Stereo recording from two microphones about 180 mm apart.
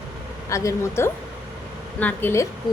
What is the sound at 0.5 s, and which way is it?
A woman's voice, 15° left (ahead or behind).